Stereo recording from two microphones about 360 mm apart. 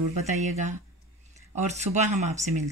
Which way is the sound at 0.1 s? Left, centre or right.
Centre.